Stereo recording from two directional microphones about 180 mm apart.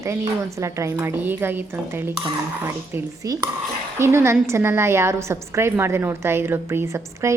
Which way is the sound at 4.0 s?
15° right (ahead or behind).